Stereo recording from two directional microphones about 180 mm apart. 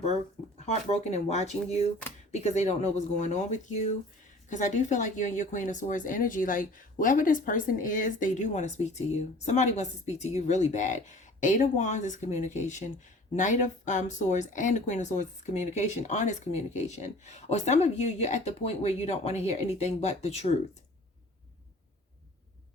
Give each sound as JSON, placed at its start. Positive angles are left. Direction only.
{"t": 0.6, "sound": "speech", "side_deg": 40}